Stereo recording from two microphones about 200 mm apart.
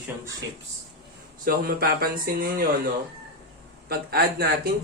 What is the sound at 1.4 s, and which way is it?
Speech, 45° right (ahead or behind).